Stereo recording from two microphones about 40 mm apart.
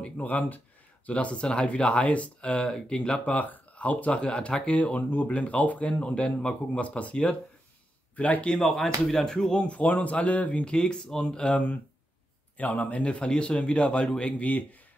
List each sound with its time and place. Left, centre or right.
0.2 s speech: left
3.3 s speech: left; by 9.7 s centre
9.7 s speech: left
10.7 s speech: centre
12.5 s speech: left
13.0 s speech: left
14.4 s speech: left